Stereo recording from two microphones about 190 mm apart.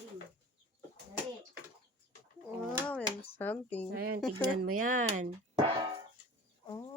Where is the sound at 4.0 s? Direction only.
55° right (ahead or behind).